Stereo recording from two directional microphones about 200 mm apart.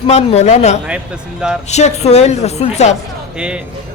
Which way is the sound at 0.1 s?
30° left (ahead or behind).